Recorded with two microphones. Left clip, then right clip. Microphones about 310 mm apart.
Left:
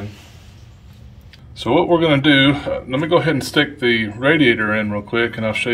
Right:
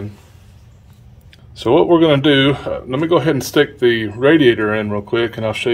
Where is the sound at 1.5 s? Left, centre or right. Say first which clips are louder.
Right 3 dB; right.